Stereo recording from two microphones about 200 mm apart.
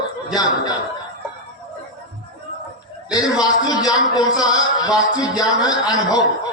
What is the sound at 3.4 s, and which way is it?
A man's voice, 20° left (ahead or behind).